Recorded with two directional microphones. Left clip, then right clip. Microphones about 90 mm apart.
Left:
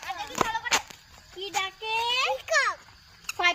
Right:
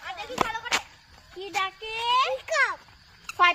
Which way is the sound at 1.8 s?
30° right (ahead or behind).